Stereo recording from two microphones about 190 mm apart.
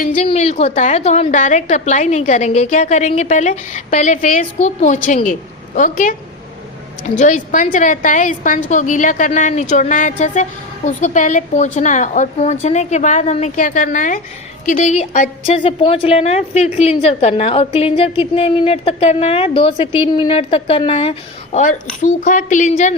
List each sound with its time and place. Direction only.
0.0 s a woman's voice: 45° left (ahead or behind)
0.3 s a woman's voice: 35° left (ahead or behind)
7.2 s a woman's voice: 40° left (ahead or behind)